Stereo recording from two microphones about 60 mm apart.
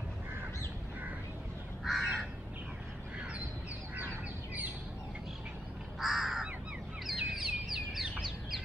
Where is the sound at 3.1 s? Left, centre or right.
Centre.